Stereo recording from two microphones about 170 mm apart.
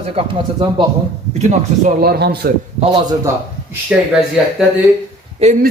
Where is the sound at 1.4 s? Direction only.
50° right (ahead or behind).